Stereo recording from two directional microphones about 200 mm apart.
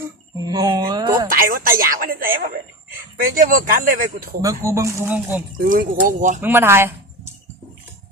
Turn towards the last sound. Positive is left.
turn(degrees=-10)  # may be behind; listen again after turning